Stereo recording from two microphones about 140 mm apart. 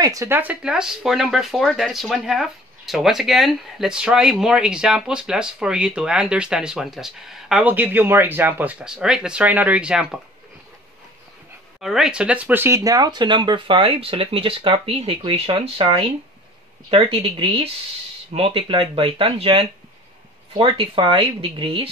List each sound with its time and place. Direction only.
0.0 s speech: 25° right (ahead or behind)
0.4 s speech: 10° right (ahead or behind)
11.8 s a woman's voice: 5° right (ahead or behind); by 21.8 s 40° right (ahead or behind)